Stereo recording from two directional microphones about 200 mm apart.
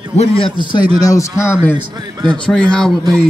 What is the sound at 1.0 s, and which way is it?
Speech, 15° left (ahead or behind).